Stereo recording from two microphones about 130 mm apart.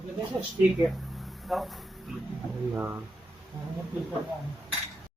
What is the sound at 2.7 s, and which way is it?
Speech, 20° right (ahead or behind).